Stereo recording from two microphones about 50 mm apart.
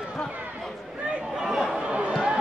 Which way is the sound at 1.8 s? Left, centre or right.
Right.